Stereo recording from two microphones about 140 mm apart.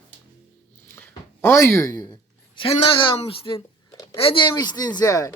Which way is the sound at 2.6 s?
40° left (ahead or behind).